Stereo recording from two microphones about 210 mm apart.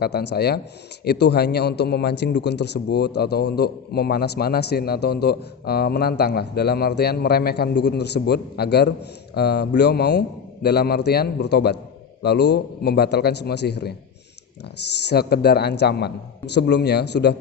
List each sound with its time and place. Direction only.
0.0 s a man's voice: 50° left (ahead or behind)
15.1 s a man's voice: 50° left (ahead or behind)